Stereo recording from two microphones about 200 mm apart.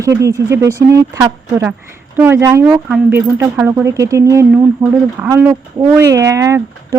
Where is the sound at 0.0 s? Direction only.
15° right (ahead or behind).